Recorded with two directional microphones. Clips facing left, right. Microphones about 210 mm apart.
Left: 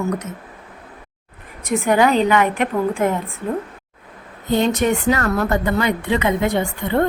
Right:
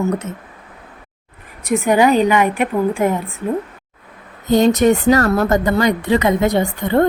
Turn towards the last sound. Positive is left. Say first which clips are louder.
# right 3 dB
turn(degrees=-40)  # may be behind; listen again after turning